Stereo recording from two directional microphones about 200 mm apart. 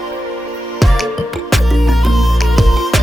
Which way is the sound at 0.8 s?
Centre (ahead or behind).